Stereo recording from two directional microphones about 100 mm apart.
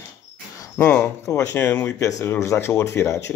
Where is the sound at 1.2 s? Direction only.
25° left (ahead or behind).